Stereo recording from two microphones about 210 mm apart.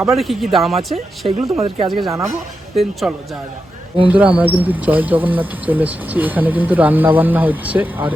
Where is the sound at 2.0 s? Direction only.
15° right (ahead or behind).